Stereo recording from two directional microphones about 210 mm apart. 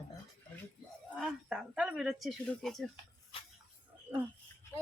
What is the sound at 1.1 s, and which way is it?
Speech, centre (ahead or behind).